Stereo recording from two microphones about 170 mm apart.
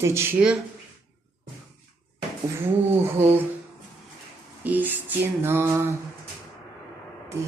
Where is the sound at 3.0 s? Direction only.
15° right (ahead or behind).